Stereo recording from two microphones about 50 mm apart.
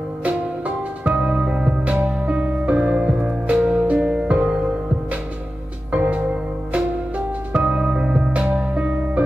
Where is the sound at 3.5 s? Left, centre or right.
Right.